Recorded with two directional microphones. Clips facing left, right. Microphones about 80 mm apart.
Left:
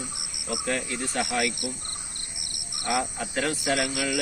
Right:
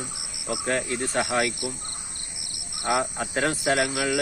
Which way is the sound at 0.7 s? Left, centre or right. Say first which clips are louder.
Right 4 dB; right.